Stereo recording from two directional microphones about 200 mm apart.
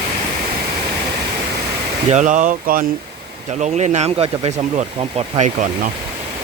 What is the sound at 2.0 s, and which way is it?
Speech, 40° right (ahead or behind).